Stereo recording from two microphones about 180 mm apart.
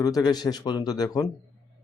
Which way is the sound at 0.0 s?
20° left (ahead or behind).